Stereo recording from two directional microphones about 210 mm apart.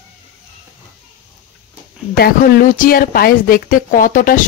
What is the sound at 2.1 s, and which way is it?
Speech, 45° left (ahead or behind).